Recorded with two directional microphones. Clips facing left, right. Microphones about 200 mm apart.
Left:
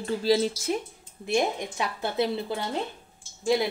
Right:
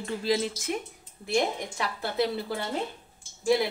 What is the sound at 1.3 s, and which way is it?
Speech, 20° left (ahead or behind).